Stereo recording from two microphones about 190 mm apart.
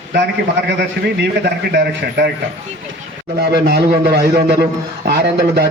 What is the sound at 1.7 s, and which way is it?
Speech, 60° right (ahead or behind).